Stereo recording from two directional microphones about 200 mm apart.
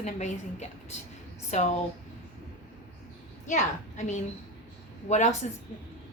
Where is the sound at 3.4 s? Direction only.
35° left (ahead or behind).